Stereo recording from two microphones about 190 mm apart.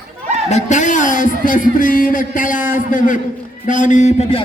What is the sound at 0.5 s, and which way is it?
A man's voice, 40° left (ahead or behind).